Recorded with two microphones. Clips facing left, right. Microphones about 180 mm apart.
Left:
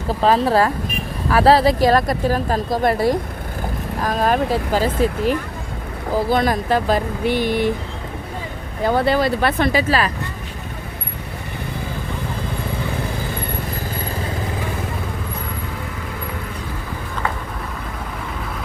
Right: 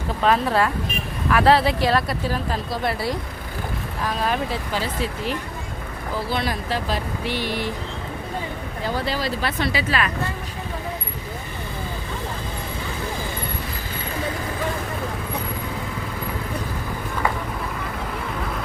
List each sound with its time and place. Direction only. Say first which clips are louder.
0.2 s speech: left 4 dB; 35° left (ahead or behind)
8.8 s speech: left 9 dB; 55° left (ahead or behind)